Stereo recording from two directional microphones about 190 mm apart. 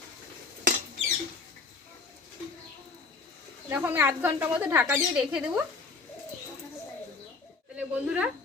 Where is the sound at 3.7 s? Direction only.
10° right (ahead or behind).